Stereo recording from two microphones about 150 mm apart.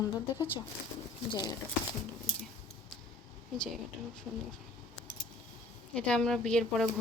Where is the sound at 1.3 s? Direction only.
30° left (ahead or behind).